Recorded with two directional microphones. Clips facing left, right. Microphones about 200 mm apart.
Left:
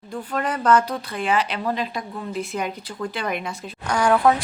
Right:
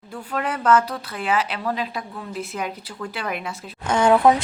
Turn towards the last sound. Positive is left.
turn(degrees=-20)  # may be behind; listen again after turning